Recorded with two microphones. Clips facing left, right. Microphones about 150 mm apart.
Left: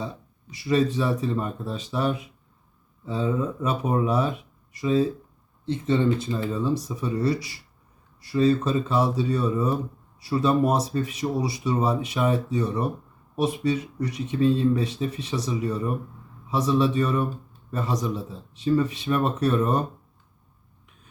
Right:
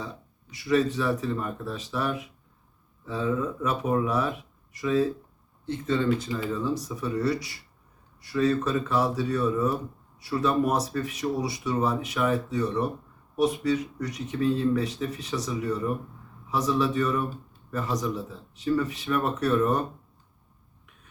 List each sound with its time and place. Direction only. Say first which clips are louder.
0.6 s speech: left 1 dB; 30° left (ahead or behind)
3.2 s speech: left 1 dB; 25° left (ahead or behind)
16.5 s a man's voice: left 3 dB; 30° left (ahead or behind)